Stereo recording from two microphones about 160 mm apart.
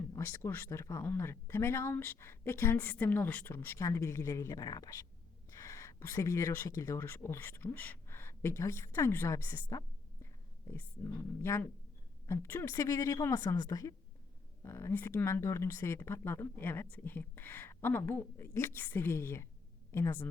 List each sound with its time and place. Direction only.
0.1 s a woman's voice: 15° left (ahead or behind)